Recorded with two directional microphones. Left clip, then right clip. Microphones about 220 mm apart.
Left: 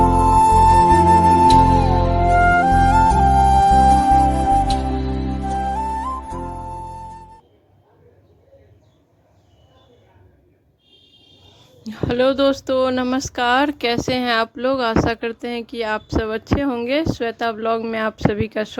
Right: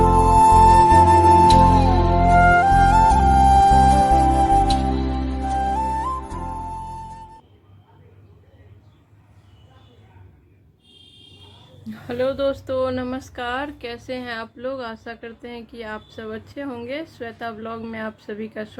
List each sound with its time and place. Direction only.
0.0 s music: centre (ahead or behind)
11.9 s speech: 40° left (ahead or behind)